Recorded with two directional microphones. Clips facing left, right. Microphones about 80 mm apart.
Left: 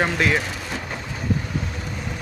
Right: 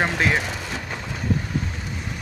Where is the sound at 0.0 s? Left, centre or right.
Right.